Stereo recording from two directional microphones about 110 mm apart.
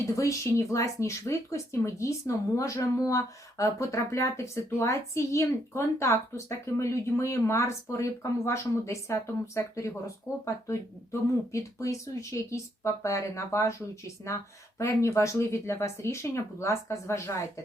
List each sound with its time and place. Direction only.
0.2 s speech: 30° left (ahead or behind)